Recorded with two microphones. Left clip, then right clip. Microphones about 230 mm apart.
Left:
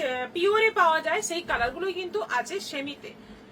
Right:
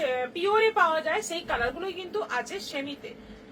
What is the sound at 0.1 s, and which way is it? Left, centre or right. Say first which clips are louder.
A woman's voice: left 1 dB; centre.